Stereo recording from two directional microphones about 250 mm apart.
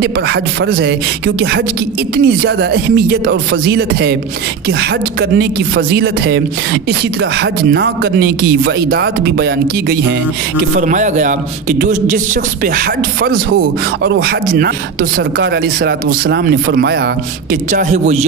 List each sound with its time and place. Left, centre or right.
0.0 s speech: right
10.8 s speech: right